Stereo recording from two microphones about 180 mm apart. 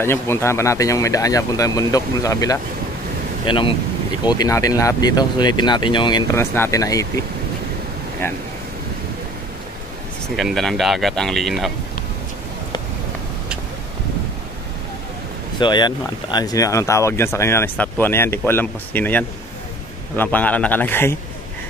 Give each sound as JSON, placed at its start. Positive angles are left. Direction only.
{"t": 0.0, "sound": "speech", "side_deg": 15}
{"t": 6.3, "sound": "speech", "side_deg": 15}
{"t": 10.2, "sound": "speech", "side_deg": 0}
{"t": 15.6, "sound": "speech", "side_deg": 25}